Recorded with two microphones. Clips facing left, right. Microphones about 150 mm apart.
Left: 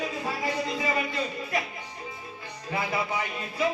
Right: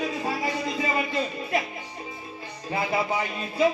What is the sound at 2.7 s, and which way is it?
Speech, 25° right (ahead or behind).